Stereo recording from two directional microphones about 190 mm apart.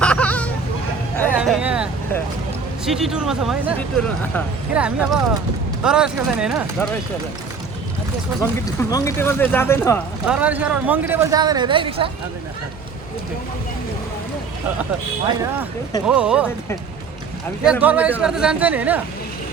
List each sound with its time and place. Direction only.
0.0 s hubbub: 5° left (ahead or behind)
1.4 s vehicle: 5° right (ahead or behind)
2.8 s speech: centre (ahead or behind)
8.4 s speech: 15° left (ahead or behind)
10.2 s speech: 5° right (ahead or behind); by 12.1 s 30° right (ahead or behind)
16.0 s speech: 5° right (ahead or behind)
17.6 s speech: 5° right (ahead or behind)